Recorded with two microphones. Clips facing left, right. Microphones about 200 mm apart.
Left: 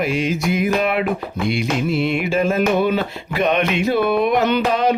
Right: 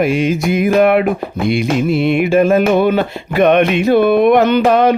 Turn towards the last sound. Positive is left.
turn(degrees=-55)  # may be behind; listen again after turning